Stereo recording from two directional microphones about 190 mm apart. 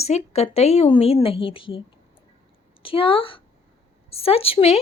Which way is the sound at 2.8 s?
30° left (ahead or behind).